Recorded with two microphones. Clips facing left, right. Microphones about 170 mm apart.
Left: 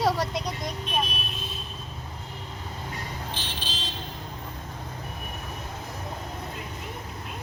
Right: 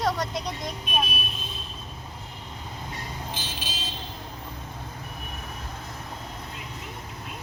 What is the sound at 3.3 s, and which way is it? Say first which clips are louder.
Vehicle: even; 10° right (ahead or behind).